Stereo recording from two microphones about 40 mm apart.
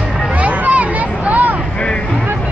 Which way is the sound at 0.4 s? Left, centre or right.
Right.